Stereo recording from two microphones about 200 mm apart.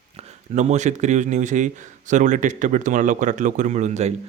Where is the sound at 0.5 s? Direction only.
35° right (ahead or behind).